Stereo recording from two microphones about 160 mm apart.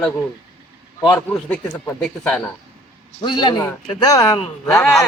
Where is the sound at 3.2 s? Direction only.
25° left (ahead or behind).